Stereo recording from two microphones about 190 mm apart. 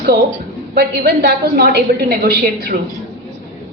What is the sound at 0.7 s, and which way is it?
A woman's voice, 55° right (ahead or behind).